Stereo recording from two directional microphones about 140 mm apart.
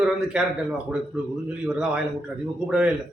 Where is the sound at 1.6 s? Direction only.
5° right (ahead or behind).